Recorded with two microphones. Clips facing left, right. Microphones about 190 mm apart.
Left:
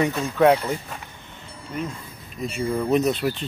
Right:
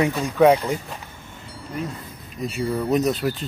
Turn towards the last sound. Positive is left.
turn(degrees=0)  # may be behind; listen again after turning